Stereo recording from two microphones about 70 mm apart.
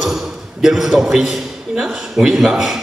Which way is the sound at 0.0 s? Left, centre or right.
Centre.